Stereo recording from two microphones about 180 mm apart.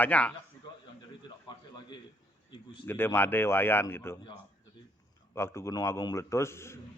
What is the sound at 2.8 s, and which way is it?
A man's voice, 10° left (ahead or behind).